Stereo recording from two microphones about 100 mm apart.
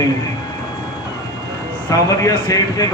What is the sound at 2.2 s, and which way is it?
Speech, 35° left (ahead or behind).